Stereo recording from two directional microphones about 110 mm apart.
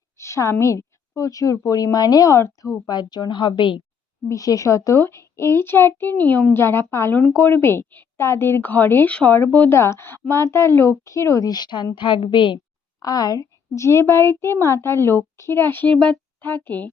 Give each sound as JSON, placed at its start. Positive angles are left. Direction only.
{"t": 0.2, "sound": "a sound", "side_deg": 25}
{"t": 0.6, "sound": "a woman's voice", "side_deg": 25}
{"t": 2.8, "sound": "a woman's voice", "side_deg": 40}
{"t": 4.3, "sound": "a woman's voice", "side_deg": 30}
{"t": 13.0, "sound": "a woman's voice", "side_deg": 35}